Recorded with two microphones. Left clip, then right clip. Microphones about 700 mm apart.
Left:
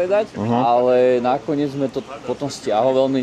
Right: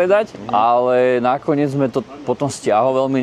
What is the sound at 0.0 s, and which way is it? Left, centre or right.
A man's voice, right.